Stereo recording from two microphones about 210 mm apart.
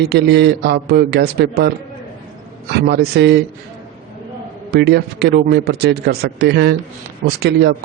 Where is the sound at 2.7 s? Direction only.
50° right (ahead or behind).